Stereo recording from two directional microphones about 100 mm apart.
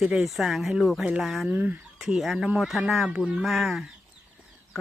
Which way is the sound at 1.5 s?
15° right (ahead or behind).